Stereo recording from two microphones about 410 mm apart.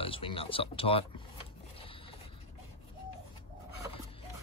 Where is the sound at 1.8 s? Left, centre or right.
Centre.